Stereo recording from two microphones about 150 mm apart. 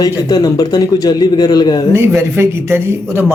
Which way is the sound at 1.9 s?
15° right (ahead or behind).